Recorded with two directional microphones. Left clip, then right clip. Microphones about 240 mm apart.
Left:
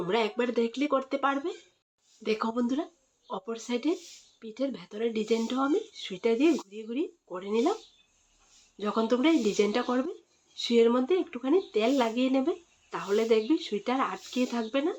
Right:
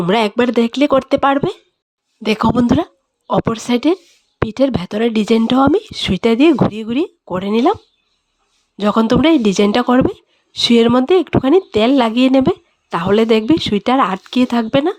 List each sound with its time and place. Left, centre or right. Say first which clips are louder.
0.0 s speech: right 13 dB; right
8.8 s speech: right 13 dB; right